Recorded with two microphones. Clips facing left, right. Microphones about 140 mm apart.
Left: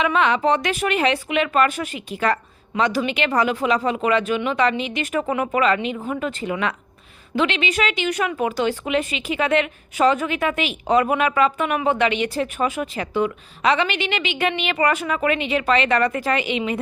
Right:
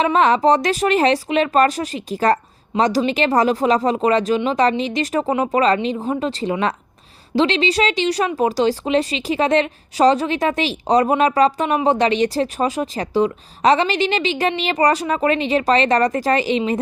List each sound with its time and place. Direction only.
0.0 s a woman's voice: 40° right (ahead or behind)